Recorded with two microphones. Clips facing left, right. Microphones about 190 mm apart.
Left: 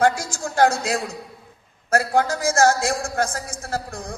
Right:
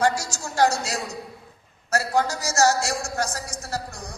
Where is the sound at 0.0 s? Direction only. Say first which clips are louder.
Left 3 dB; 55° left (ahead or behind).